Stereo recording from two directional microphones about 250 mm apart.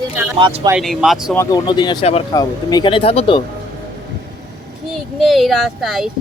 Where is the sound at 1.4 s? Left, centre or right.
Centre.